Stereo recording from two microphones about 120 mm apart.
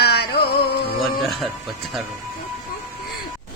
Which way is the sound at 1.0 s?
Centre (ahead or behind).